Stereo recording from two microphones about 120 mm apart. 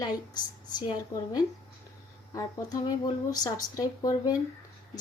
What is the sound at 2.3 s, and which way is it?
A woman's voice, 30° left (ahead or behind).